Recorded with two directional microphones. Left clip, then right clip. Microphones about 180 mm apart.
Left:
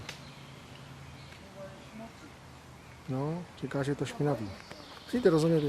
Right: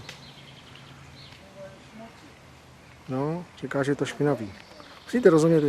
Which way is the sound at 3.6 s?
10° left (ahead or behind).